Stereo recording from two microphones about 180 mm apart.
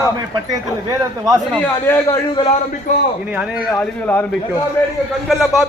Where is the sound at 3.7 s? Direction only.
15° left (ahead or behind).